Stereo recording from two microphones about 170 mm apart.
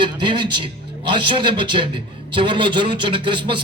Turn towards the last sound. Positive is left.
turn(degrees=-30)  # may be behind; listen again after turning